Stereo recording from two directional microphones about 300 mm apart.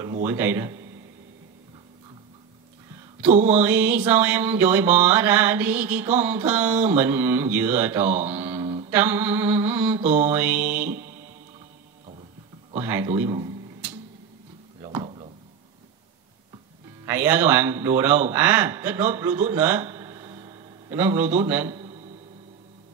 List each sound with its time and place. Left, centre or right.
0.2 s mantra: centre
3.4 s a sound: centre
8.6 s mantra: right
8.9 s mantra: centre
12.7 s a sound: centre
17.0 s speech: centre